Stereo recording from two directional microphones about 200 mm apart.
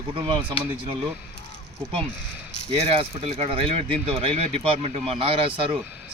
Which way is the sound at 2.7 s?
30° right (ahead or behind).